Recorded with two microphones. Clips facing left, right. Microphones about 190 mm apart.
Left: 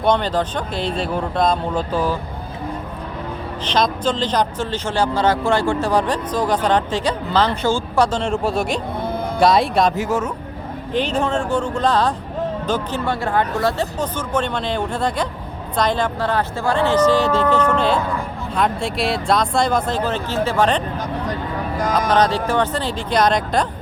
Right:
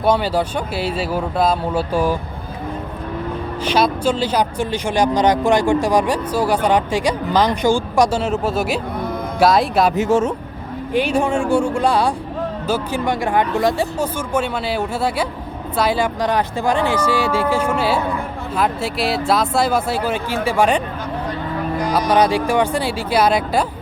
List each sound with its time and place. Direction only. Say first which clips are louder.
0.0 s speech: right 1 dB; 5° right (ahead or behind)
3.6 s speech: right 2 dB; 10° right (ahead or behind)
9.9 s speech: right 5 dB; 25° right (ahead or behind)
10.9 s speech: right 2 dB; 10° right (ahead or behind)
21.9 s speech: right 2 dB; 10° right (ahead or behind)